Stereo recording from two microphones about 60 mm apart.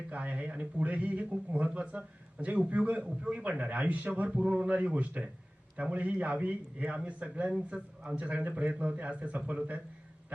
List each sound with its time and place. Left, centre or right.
0.1 s a man's voice: right